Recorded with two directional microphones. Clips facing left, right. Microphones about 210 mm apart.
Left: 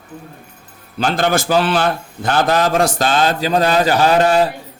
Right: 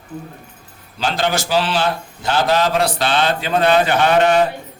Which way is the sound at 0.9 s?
55° left (ahead or behind).